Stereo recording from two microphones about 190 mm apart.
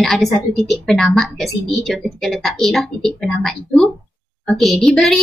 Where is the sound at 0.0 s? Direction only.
Centre (ahead or behind).